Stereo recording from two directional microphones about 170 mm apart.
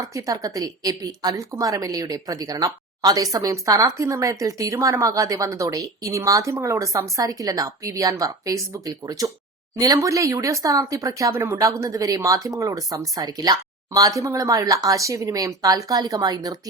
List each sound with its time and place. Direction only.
0.1 s a woman's voice: 20° right (ahead or behind)